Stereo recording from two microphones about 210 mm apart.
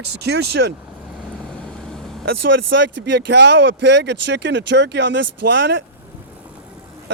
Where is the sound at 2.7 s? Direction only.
55° right (ahead or behind).